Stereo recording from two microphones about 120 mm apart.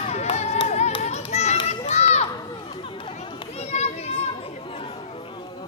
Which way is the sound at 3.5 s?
60° left (ahead or behind).